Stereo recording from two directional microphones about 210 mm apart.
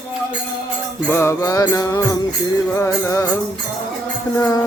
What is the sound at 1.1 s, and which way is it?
Mantra, 10° left (ahead or behind).